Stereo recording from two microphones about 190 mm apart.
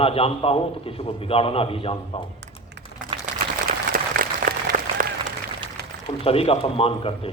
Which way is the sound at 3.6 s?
50° right (ahead or behind).